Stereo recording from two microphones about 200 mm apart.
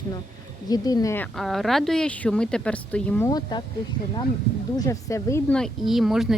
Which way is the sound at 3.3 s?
20° left (ahead or behind).